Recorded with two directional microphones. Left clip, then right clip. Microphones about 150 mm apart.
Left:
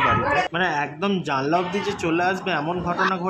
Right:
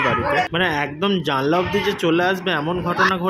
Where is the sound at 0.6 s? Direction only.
15° right (ahead or behind).